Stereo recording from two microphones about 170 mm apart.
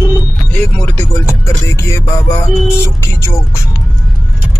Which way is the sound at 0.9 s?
15° left (ahead or behind).